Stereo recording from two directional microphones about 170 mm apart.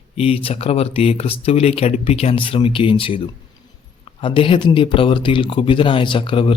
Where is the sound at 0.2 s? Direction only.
35° left (ahead or behind).